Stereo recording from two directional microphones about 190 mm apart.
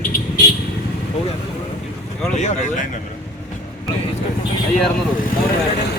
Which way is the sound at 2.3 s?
40° left (ahead or behind).